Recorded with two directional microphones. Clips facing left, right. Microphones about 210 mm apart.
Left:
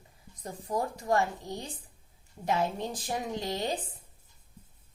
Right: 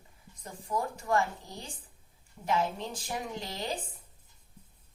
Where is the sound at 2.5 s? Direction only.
35° left (ahead or behind).